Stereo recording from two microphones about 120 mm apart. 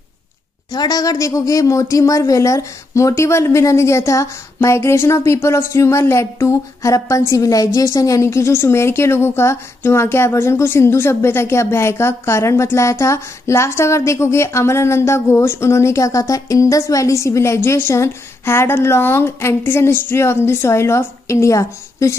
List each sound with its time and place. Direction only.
0.7 s speech: 35° left (ahead or behind)